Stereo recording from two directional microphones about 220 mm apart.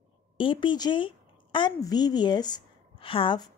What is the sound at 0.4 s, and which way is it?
A woman's voice, 20° left (ahead or behind).